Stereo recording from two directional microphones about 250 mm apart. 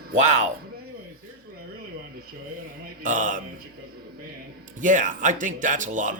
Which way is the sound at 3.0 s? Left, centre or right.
Right.